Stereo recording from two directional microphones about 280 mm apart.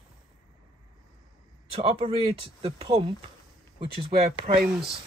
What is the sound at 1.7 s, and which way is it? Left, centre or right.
Speech, right.